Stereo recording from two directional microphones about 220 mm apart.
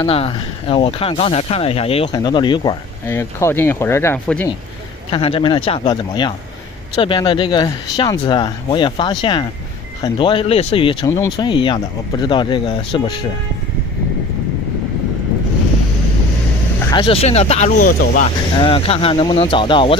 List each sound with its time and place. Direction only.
0.0 s speech: 25° left (ahead or behind); by 4.5 s 10° left (ahead or behind)
5.1 s speech: 25° left (ahead or behind)
16.9 s speech: 25° left (ahead or behind)
18.6 s speech: 25° left (ahead or behind)